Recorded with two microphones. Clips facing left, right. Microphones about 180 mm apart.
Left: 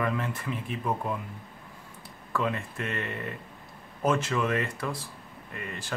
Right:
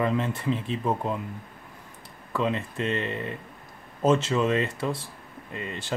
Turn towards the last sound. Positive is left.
turn(degrees=-25)  # may be behind; listen again after turning